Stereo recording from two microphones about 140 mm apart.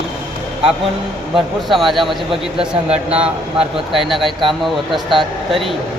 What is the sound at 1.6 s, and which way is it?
Speech, centre (ahead or behind).